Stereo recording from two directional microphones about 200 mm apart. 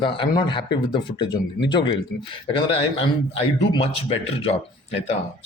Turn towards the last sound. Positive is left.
turn(degrees=30)  # may be behind; listen again after turning